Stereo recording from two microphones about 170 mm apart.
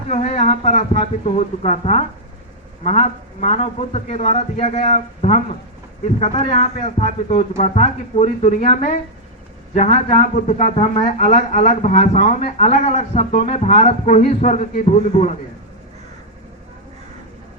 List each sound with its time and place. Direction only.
0.1 s speech: 40° left (ahead or behind)